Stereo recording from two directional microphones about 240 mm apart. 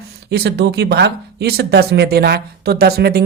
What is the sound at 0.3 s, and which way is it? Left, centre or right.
Speech, right.